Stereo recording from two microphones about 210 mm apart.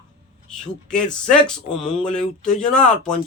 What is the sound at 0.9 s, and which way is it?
Speech, 5° left (ahead or behind).